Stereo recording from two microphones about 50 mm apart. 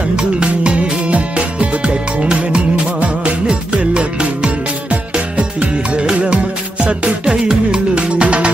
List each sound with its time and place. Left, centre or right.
0.1 s music: centre
7.2 s music: centre